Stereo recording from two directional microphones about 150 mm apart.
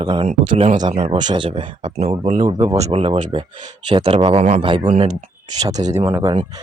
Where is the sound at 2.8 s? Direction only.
40° right (ahead or behind).